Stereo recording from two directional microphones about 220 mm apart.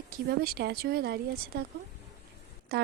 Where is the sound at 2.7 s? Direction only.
45° right (ahead or behind).